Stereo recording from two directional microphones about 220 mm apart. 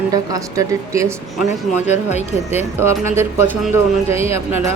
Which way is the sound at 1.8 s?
30° left (ahead or behind).